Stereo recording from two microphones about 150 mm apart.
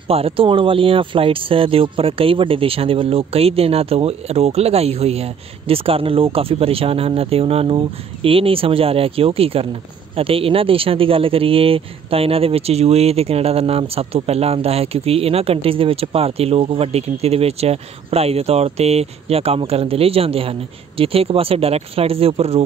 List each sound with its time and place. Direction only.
0.1 s speech: 40° right (ahead or behind)